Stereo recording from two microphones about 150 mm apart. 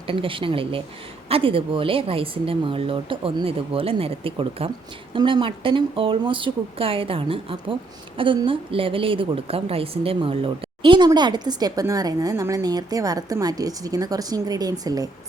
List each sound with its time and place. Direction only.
0.1 s speech: 35° right (ahead or behind)